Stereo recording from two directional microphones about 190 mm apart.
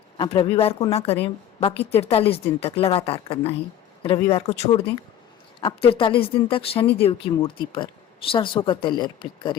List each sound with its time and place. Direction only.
0.2 s a woman's voice: 30° left (ahead or behind)